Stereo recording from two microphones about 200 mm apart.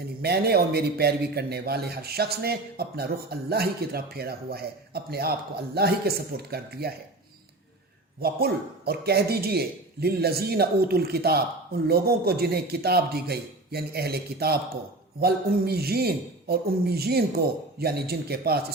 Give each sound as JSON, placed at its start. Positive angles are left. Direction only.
{"t": 0.2, "sound": "a man's voice", "side_deg": -50}
{"t": 8.2, "sound": "a man's voice", "side_deg": -50}